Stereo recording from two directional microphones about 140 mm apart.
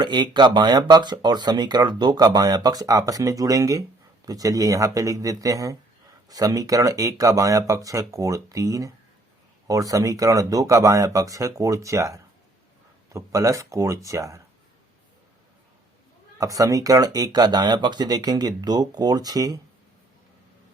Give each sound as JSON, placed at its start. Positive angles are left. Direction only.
{"t": 0.0, "sound": "speech", "side_deg": -35}
{"t": 16.4, "sound": "speech", "side_deg": -25}